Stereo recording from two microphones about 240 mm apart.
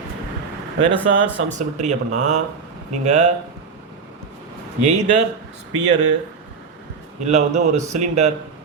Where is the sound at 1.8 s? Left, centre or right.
Right.